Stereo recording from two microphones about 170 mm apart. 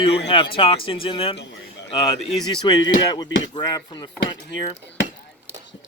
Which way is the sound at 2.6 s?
25° left (ahead or behind).